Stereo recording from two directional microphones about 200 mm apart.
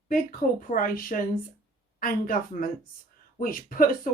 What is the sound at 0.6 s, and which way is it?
Speech, 45° left (ahead or behind).